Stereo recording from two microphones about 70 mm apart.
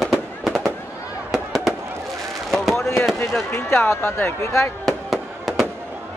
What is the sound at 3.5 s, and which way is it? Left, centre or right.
Speech, left.